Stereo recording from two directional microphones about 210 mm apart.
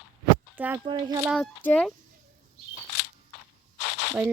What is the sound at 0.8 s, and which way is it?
Speech, 20° right (ahead or behind).